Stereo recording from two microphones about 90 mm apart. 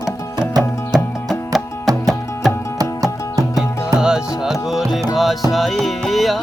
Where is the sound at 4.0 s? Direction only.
10° right (ahead or behind).